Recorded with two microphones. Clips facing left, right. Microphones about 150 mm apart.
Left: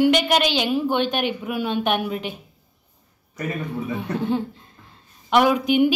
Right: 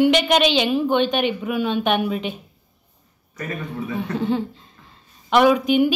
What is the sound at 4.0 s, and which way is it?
A woman's voice, 15° left (ahead or behind).